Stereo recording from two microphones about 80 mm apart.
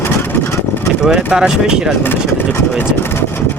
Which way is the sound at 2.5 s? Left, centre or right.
Left.